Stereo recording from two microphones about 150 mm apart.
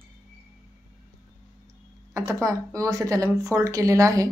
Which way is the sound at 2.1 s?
20° right (ahead or behind).